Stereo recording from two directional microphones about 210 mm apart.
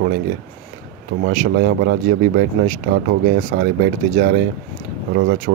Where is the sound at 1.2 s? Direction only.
45° right (ahead or behind).